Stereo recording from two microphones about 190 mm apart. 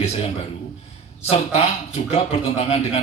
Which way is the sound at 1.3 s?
35° left (ahead or behind).